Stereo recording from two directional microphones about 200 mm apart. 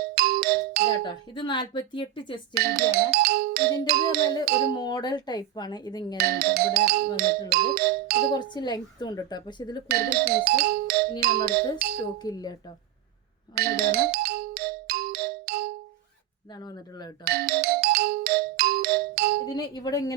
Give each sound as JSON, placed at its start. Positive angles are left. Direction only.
{"t": 0.0, "sound": "music", "side_deg": -50}
{"t": 1.0, "sound": "speech", "side_deg": 25}
{"t": 2.6, "sound": "music", "side_deg": -50}
{"t": 4.8, "sound": "speech", "side_deg": 20}
{"t": 6.1, "sound": "music", "side_deg": -50}
{"t": 8.3, "sound": "speech", "side_deg": 20}
{"t": 9.9, "sound": "music", "side_deg": -50}
{"t": 12.2, "sound": "speech", "side_deg": 20}
{"t": 13.6, "sound": "music", "side_deg": -50}
{"t": 16.6, "sound": "speech", "side_deg": 20}
{"t": 17.2, "sound": "music", "side_deg": -50}
{"t": 19.5, "sound": "tuning fork", "side_deg": 20}